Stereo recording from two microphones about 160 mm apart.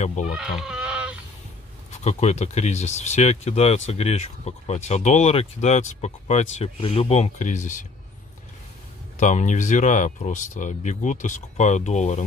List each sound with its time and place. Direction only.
0.0 s speech: 50° left (ahead or behind)
0.4 s a sound: 5° right (ahead or behind)
2.0 s speech: 45° left (ahead or behind)
9.2 s speech: 50° left (ahead or behind)